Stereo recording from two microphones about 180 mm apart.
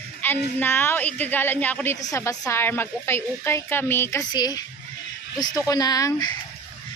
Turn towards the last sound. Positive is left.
turn(degrees=20)  # may be behind; listen again after turning